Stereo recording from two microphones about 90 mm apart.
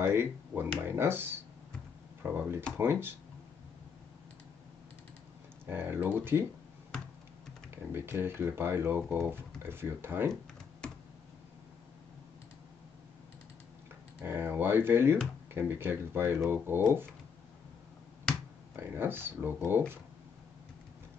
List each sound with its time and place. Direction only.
0.0 s speech: 25° right (ahead or behind)
5.7 s speech: 25° right (ahead or behind)
7.7 s speech: 25° right (ahead or behind)
14.2 s speech: 25° right (ahead or behind)
18.8 s speech: 25° right (ahead or behind)